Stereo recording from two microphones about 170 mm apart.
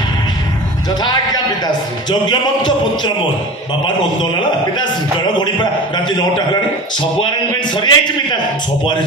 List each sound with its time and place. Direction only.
2.0 s a man's voice: 25° left (ahead or behind)
5.4 s a man's voice: 25° left (ahead or behind)